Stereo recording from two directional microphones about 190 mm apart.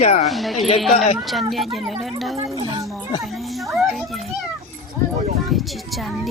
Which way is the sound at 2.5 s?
20° right (ahead or behind).